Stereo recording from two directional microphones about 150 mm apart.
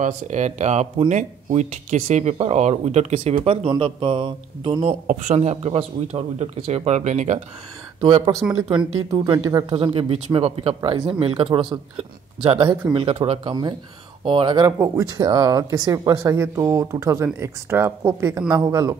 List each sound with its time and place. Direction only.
0.0 s speech: 50° right (ahead or behind)
3.4 s speech: 35° right (ahead or behind)
5.0 s speech: 55° right (ahead or behind)
8.0 s speech: 25° right (ahead or behind)
9.8 s speech: 35° right (ahead or behind); by 18.9 s 20° right (ahead or behind)